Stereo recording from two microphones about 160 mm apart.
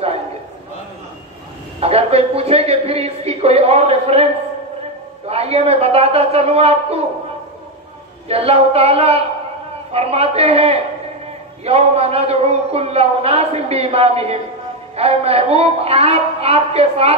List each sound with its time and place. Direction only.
1.8 s a man's voice: 40° right (ahead or behind)
5.3 s a man's voice: 40° right (ahead or behind)
8.3 s a man's voice: 40° right (ahead or behind)